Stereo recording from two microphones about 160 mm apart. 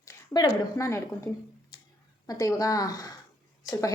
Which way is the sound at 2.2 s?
20° left (ahead or behind).